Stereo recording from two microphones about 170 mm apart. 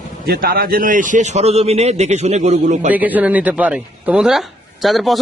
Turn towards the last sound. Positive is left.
turn(degrees=0)  # may be behind; listen again after turning